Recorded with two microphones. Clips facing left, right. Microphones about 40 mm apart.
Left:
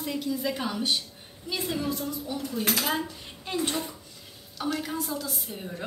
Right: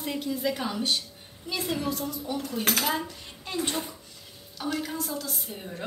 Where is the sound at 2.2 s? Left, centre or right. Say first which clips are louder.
Right 1 dB; right.